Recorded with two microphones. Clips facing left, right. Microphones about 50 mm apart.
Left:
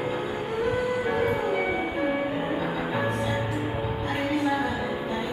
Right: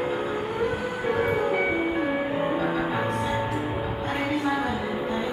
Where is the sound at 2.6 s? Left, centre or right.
Centre.